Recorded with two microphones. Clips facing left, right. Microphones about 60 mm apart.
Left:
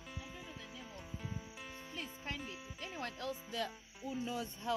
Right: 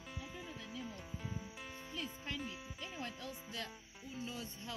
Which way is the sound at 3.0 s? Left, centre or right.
Left.